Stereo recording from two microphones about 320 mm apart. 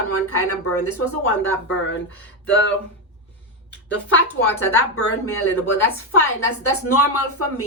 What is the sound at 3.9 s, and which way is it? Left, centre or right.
A woman's voice, left.